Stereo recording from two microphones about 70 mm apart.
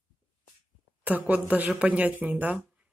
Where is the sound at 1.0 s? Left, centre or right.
Right.